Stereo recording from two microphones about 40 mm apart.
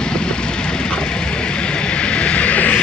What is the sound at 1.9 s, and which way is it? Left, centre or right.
Music, left.